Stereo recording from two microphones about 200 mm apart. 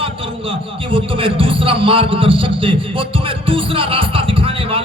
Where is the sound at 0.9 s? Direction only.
25° right (ahead or behind).